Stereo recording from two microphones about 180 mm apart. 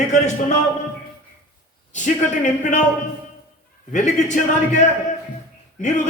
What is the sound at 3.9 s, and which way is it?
A man's voice, 45° left (ahead or behind).